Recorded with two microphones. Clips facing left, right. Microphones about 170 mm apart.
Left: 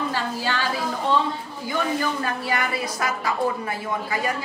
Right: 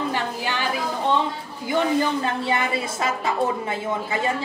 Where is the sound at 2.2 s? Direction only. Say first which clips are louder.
Right 2 dB; 25° right (ahead or behind).